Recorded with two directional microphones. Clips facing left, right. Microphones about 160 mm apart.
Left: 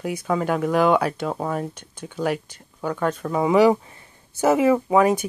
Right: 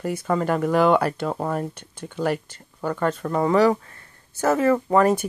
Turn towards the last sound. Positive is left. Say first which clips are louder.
# even
turn(degrees=5)  # may be behind; listen again after turning